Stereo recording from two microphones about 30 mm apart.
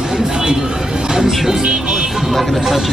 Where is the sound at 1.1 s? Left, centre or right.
Centre.